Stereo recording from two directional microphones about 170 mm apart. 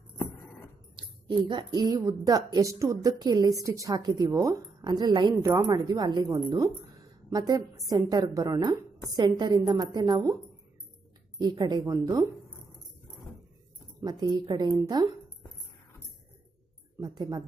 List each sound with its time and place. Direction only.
0.9 s a woman's voice: 25° right (ahead or behind)
11.3 s a woman's voice: 25° right (ahead or behind)
14.0 s a woman's voice: 25° right (ahead or behind)
17.0 s a woman's voice: 25° right (ahead or behind)